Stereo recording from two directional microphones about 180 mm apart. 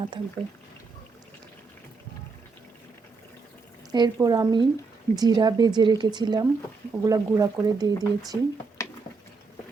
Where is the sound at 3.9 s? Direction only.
20° right (ahead or behind).